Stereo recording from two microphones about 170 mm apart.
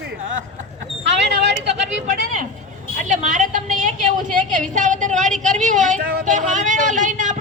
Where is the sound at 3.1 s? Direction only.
45° right (ahead or behind).